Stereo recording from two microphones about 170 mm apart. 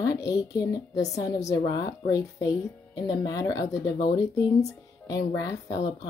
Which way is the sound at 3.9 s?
65° left (ahead or behind).